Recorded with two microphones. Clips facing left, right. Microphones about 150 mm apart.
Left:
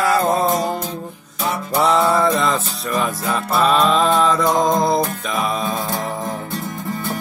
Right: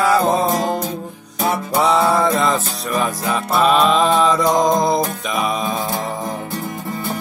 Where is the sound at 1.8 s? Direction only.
5° right (ahead or behind).